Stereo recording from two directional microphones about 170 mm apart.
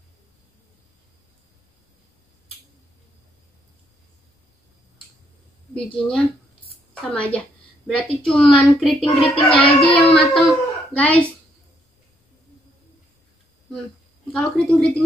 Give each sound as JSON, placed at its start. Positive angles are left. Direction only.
{"t": 5.8, "sound": "a woman's voice", "side_deg": 5}
{"t": 9.0, "sound": "child singing", "side_deg": 30}
{"t": 10.1, "sound": "speech", "side_deg": 5}
{"t": 14.3, "sound": "speech", "side_deg": 5}